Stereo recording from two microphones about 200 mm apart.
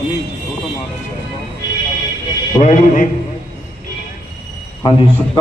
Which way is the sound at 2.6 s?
35° left (ahead or behind).